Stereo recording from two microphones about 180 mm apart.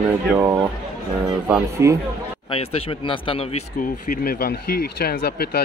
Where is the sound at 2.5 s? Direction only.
35° left (ahead or behind).